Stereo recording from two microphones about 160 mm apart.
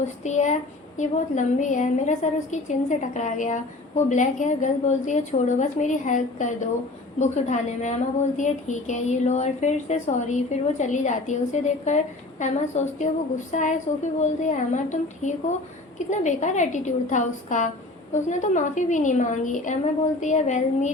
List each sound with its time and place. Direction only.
0.3 s a woman's voice: 45° left (ahead or behind)